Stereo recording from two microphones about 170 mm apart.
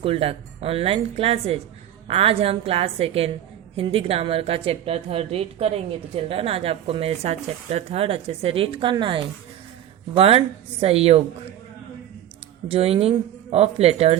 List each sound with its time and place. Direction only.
0.0 s a woman's voice: 35° right (ahead or behind)
12.6 s a woman's voice: 35° right (ahead or behind)